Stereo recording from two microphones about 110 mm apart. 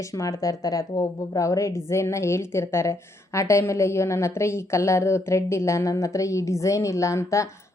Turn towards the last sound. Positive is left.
turn(degrees=25)  # may be behind; listen again after turning